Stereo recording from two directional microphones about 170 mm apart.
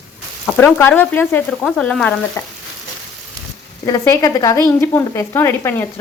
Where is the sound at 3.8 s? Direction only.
20° left (ahead or behind).